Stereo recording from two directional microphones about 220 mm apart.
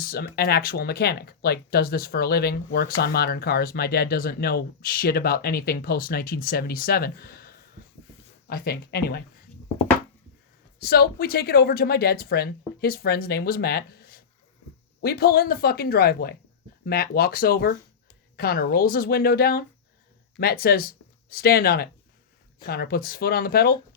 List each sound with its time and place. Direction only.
0.0 s speech: 45° left (ahead or behind)
10.8 s speech: 45° left (ahead or behind)